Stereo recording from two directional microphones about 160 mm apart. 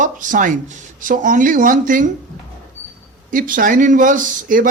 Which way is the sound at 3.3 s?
60° right (ahead or behind).